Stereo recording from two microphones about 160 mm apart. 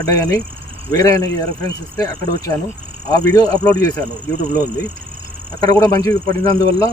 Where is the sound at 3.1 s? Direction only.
25° left (ahead or behind).